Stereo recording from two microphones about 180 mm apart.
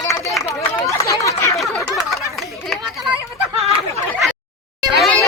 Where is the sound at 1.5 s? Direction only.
Centre (ahead or behind).